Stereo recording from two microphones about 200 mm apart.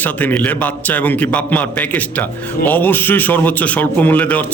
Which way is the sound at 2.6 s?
10° left (ahead or behind).